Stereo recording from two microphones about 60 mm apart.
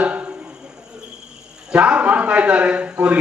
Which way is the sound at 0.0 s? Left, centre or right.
Right.